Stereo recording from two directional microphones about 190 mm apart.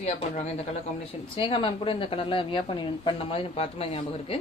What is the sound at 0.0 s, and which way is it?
A woman's voice, 35° left (ahead or behind).